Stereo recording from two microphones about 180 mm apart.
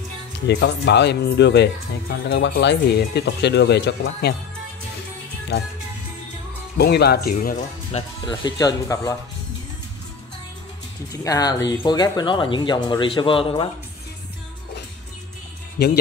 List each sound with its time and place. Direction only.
0.5 s speech: 75° left (ahead or behind)
6.8 s speech: 65° left (ahead or behind)
7.9 s speech: 25° left (ahead or behind)
11.2 s speech: 20° left (ahead or behind)
15.8 s speech: 65° left (ahead or behind)